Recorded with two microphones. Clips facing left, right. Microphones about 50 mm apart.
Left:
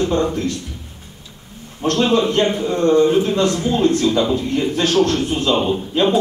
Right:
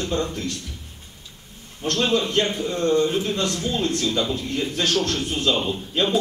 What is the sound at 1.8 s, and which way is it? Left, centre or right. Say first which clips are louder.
A man's voice: left 6 dB; left.